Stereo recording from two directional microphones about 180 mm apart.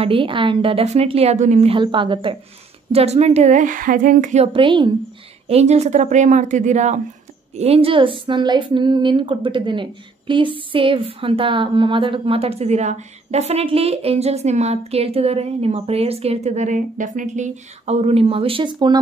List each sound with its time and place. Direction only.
0.0 s a woman's voice: 30° right (ahead or behind)